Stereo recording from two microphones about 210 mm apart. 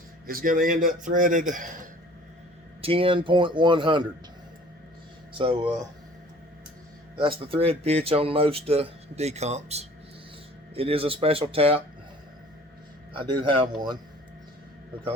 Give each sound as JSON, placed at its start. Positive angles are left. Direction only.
{"t": 0.3, "sound": "a man's voice", "side_deg": -40}
{"t": 2.8, "sound": "speech", "side_deg": -25}
{"t": 5.3, "sound": "speech", "side_deg": -25}
{"t": 7.2, "sound": "speech", "side_deg": -25}
{"t": 13.1, "sound": "speech", "side_deg": -25}